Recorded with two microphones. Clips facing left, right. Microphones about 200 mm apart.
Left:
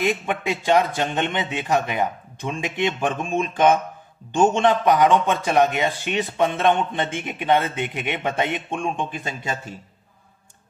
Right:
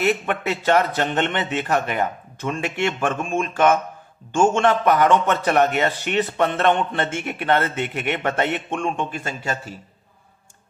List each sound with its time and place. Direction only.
0.0 s a man's voice: 15° left (ahead or behind)
4.3 s a man's voice: 20° left (ahead or behind)